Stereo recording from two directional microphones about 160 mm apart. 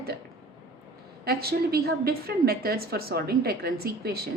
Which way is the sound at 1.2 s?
75° right (ahead or behind).